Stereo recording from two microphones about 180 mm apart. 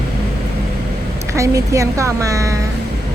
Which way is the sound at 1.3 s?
15° right (ahead or behind).